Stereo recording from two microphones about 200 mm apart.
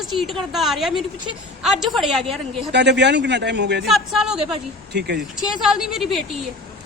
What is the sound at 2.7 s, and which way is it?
A man's voice, 60° right (ahead or behind).